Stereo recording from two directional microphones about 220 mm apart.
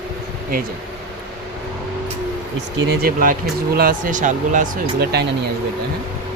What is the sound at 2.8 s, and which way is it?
Speech, 45° right (ahead or behind).